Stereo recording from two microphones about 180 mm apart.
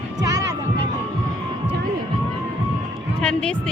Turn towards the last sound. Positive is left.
turn(degrees=5)  # may be behind; listen again after turning